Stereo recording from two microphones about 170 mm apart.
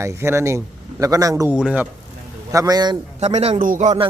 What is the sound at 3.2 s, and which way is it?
Speech, 40° right (ahead or behind).